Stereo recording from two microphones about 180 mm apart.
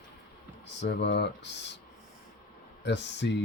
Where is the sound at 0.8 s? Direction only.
75° left (ahead or behind).